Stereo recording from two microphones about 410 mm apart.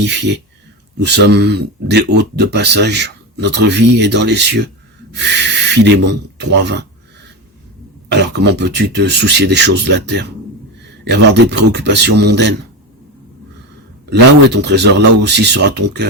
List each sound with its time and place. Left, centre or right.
1.0 s speech: right
8.1 s speech: right
11.3 s speech: right
14.1 s speech: right